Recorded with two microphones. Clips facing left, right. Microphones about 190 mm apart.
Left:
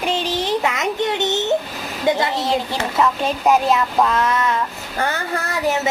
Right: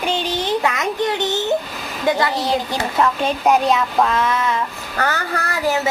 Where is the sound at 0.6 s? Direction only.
20° left (ahead or behind).